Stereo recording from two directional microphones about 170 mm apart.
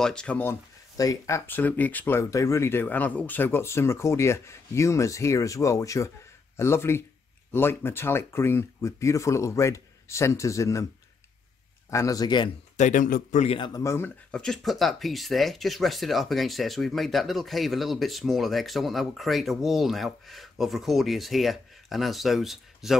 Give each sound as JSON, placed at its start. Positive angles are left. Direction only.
{"t": 0.0, "sound": "speech", "side_deg": 5}
{"t": 11.9, "sound": "a man's voice", "side_deg": 20}
{"t": 12.7, "sound": "speech", "side_deg": 45}
{"t": 13.6, "sound": "speech", "side_deg": 20}